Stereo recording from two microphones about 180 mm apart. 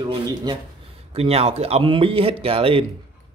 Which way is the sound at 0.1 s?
25° right (ahead or behind).